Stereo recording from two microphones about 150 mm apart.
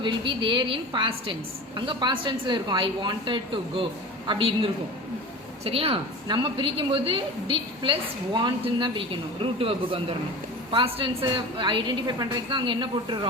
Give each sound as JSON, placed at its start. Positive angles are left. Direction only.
{"t": 0.0, "sound": "a woman's voice", "side_deg": -30}